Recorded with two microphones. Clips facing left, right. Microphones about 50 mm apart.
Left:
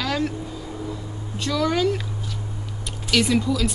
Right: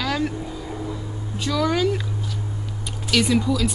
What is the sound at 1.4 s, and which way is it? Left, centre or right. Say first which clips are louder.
Speech: even; centre.